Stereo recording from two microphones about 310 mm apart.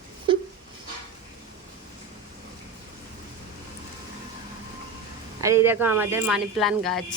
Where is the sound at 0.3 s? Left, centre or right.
Centre.